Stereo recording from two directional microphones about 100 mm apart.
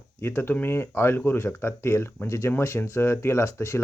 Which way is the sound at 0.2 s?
20° left (ahead or behind).